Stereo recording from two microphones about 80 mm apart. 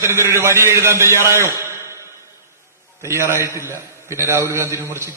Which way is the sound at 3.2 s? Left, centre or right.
Right.